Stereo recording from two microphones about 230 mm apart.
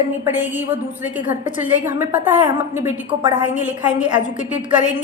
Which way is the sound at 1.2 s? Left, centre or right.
Left.